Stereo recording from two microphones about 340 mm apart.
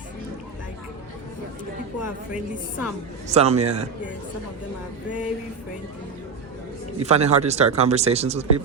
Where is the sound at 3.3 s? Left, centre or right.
Centre.